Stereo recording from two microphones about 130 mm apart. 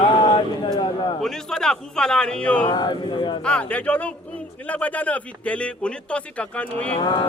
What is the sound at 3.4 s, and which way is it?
A man's voice, 10° left (ahead or behind).